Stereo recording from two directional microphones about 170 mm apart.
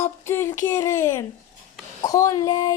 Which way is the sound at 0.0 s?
15° left (ahead or behind).